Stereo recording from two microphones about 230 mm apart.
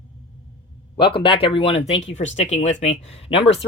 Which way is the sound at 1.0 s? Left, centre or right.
Left.